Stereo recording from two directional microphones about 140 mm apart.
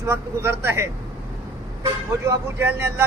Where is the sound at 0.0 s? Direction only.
20° right (ahead or behind).